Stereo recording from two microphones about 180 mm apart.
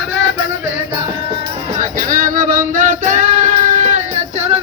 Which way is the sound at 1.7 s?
45° right (ahead or behind).